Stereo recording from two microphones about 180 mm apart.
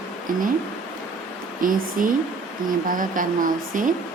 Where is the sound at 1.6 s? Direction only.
50° right (ahead or behind).